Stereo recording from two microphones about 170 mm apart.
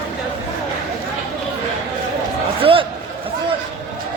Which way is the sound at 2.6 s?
30° right (ahead or behind).